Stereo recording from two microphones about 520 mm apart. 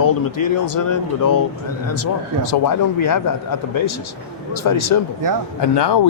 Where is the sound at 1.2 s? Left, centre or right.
Left.